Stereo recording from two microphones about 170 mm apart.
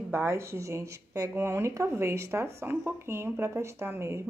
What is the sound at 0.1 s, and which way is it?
Speech, 15° right (ahead or behind).